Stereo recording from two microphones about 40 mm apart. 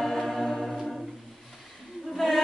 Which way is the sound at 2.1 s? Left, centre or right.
Centre.